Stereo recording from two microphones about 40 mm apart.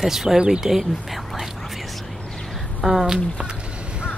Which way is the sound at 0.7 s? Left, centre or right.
Centre.